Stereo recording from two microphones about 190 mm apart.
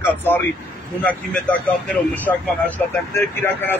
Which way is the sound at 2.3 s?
10° left (ahead or behind).